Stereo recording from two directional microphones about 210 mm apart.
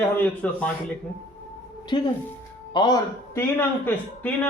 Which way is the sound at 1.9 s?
20° left (ahead or behind).